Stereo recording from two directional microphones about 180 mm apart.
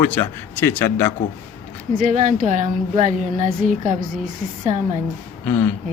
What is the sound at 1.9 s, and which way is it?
A woman's voice, 45° right (ahead or behind).